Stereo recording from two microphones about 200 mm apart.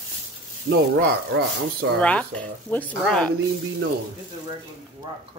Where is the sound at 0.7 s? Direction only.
50° right (ahead or behind).